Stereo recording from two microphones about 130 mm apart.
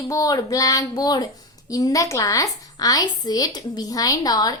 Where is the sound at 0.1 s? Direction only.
30° left (ahead or behind).